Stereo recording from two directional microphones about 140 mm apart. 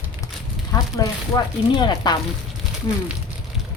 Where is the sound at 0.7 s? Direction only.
25° left (ahead or behind).